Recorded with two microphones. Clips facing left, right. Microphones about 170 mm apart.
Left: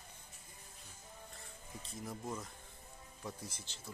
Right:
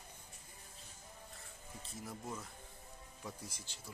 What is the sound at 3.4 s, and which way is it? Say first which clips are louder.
Speech: left 1 dB; 10° right (ahead or behind).